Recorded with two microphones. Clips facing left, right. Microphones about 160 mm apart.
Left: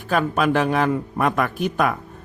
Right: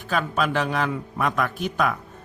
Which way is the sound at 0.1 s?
55° left (ahead or behind).